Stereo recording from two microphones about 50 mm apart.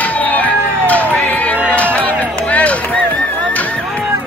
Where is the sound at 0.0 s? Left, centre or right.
Left.